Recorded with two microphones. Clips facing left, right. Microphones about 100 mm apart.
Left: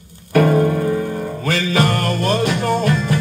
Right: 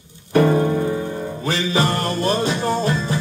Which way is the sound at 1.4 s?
20° right (ahead or behind).